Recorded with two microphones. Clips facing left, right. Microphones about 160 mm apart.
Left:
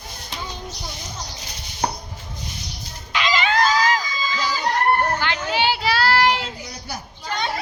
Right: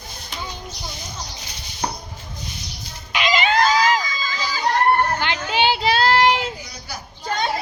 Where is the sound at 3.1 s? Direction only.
15° right (ahead or behind).